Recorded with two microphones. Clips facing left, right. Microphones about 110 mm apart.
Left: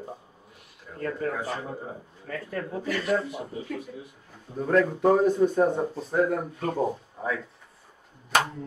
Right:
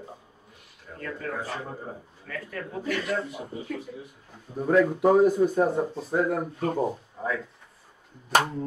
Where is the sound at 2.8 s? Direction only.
Centre (ahead or behind).